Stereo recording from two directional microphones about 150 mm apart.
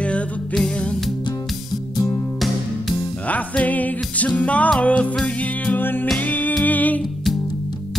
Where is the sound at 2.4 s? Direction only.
5° left (ahead or behind).